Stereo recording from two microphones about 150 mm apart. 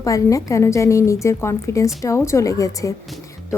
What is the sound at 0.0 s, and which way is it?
A woman's voice, 20° left (ahead or behind).